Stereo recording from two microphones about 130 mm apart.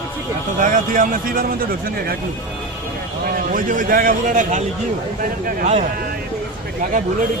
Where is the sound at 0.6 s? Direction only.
85° right.